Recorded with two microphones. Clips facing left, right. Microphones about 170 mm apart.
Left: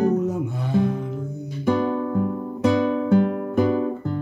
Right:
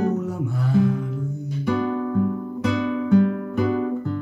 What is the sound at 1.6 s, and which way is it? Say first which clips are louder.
Music: left 2 dB; 40° left (ahead or behind).